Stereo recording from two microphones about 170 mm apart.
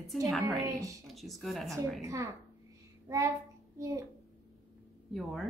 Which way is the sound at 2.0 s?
15° right (ahead or behind).